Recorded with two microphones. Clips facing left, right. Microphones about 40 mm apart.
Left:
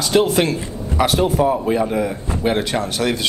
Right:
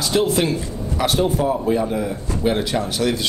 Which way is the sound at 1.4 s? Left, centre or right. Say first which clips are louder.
Left 2 dB; centre.